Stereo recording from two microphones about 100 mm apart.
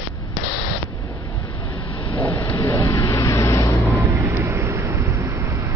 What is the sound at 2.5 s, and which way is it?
Vehicle, 30° left (ahead or behind).